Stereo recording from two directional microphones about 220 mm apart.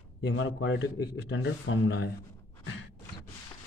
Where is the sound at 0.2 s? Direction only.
55° left (ahead or behind).